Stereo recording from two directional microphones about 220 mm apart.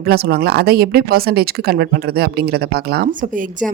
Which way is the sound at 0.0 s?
45° right (ahead or behind).